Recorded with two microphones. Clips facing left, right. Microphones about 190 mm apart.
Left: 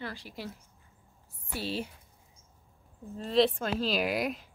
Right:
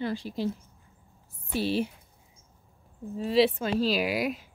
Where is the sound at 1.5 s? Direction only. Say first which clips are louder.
Right 7 dB; 15° right (ahead or behind).